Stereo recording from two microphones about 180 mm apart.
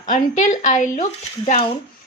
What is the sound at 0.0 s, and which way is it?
A woman's voice, 45° left (ahead or behind).